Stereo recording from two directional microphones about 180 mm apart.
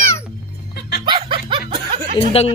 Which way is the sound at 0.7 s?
65° left (ahead or behind).